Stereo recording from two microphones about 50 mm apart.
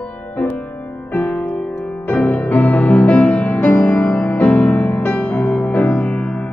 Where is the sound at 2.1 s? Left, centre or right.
Left.